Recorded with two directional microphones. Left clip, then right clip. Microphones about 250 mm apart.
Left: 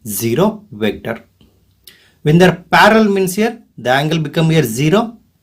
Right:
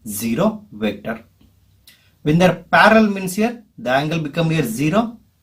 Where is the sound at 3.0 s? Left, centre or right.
Left.